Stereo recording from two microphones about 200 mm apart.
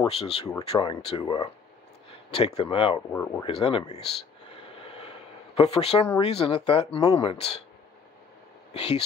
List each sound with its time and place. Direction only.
0.0 s speech: 30° left (ahead or behind)
3.1 s speech: 10° left (ahead or behind)
3.4 s speech: 25° left (ahead or behind)
5.6 s speech: 30° left (ahead or behind)
8.7 s speech: 30° left (ahead or behind)